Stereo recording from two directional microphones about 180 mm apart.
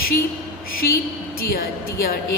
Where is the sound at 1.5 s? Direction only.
55° left (ahead or behind).